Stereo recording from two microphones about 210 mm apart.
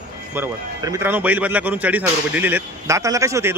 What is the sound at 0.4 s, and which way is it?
Speech, 10° right (ahead or behind).